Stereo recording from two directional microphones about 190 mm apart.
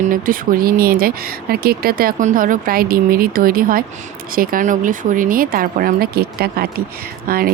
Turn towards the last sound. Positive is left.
turn(degrees=-50)  # may be behind; listen again after turning